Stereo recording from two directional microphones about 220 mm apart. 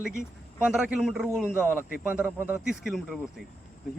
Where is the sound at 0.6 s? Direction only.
5° right (ahead or behind).